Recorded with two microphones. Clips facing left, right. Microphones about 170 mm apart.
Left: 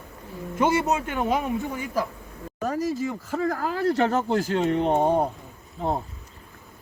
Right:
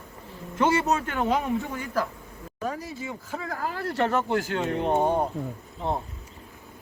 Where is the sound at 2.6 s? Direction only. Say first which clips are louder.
Left 7 dB; 40° left (ahead or behind).